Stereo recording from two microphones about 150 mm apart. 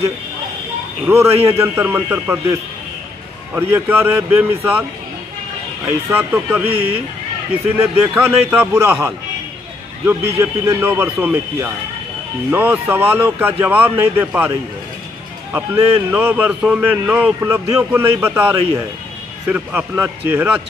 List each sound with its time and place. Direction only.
1.0 s a man's voice: 15° right (ahead or behind)
5.9 s a man's voice: 15° right (ahead or behind)
7.7 s a man's voice: 10° right (ahead or behind)
15.5 s a man's voice: 15° right (ahead or behind)